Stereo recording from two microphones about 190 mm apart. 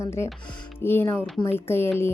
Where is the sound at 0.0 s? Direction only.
15° left (ahead or behind).